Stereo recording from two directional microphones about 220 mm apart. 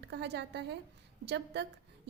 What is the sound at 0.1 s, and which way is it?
A woman's voice, 50° right (ahead or behind).